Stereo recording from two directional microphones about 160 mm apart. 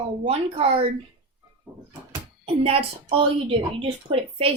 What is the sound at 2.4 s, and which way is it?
Speech, 35° right (ahead or behind).